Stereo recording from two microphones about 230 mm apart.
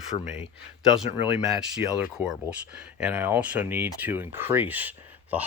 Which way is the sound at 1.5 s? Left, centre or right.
Centre.